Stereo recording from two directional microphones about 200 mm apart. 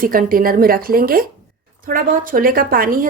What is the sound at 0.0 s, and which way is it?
A woman's voice, 45° right (ahead or behind).